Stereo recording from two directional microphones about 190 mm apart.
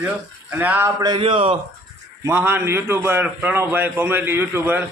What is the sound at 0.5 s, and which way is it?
Speech, 10° right (ahead or behind).